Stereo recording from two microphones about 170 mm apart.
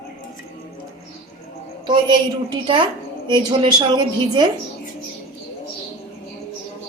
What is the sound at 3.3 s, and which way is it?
A woman's voice, 25° right (ahead or behind).